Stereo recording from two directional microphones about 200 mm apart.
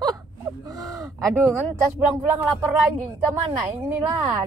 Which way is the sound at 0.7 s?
15° right (ahead or behind).